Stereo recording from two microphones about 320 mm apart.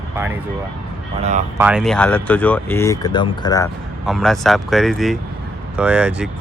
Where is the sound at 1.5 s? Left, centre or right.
Centre.